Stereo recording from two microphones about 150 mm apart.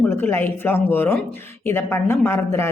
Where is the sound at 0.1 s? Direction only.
15° left (ahead or behind).